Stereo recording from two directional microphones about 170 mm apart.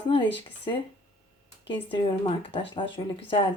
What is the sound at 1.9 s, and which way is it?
Speech, 30° left (ahead or behind).